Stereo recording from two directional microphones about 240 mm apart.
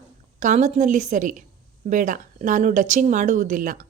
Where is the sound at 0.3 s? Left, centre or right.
Right.